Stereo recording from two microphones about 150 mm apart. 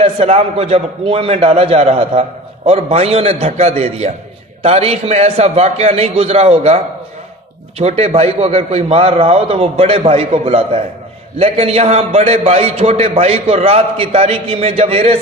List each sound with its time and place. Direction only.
0.0 s a man's voice: 45° right (ahead or behind)
7.8 s a man's voice: 45° right (ahead or behind)